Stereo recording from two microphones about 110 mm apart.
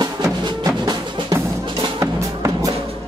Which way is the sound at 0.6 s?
40° right (ahead or behind).